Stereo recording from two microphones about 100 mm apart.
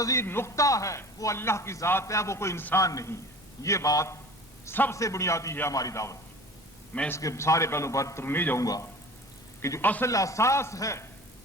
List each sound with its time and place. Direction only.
0.0 s a man's voice: 30° left (ahead or behind)
8.6 s a man's voice: 35° left (ahead or behind)
9.8 s speech: 20° left (ahead or behind)
10.1 s speech: 35° left (ahead or behind)